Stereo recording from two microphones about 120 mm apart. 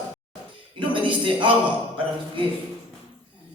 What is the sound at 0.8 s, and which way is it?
Speech, 45° right (ahead or behind).